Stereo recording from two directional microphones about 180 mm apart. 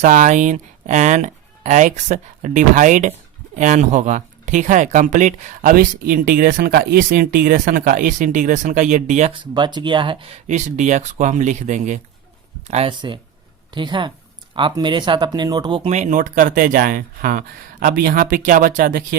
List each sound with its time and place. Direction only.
0.0 s speech: 45° right (ahead or behind)
9.4 s speech: 25° right (ahead or behind)
10.4 s speech: 40° right (ahead or behind)